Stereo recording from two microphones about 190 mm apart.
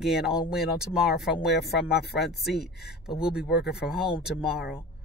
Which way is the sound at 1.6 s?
55° left (ahead or behind).